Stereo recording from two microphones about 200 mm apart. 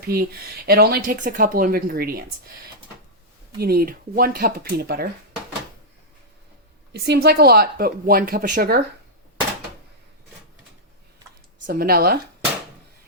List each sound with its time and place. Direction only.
0.0 s speech: 50° right (ahead or behind)
3.6 s speech: 50° right (ahead or behind)
6.9 s speech: 55° right (ahead or behind)
11.6 s speech: 50° right (ahead or behind)